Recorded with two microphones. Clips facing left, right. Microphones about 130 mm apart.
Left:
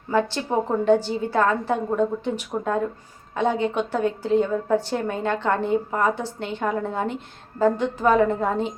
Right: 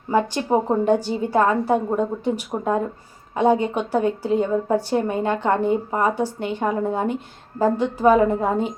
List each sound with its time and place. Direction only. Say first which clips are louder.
0.1 s a woman's voice: right 3 dB; 15° right (ahead or behind)